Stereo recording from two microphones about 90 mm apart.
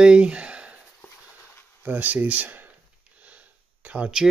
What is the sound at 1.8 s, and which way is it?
Speech, 20° right (ahead or behind).